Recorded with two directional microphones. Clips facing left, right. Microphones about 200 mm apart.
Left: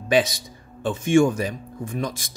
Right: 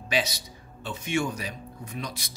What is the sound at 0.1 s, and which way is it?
Speech, 50° left (ahead or behind).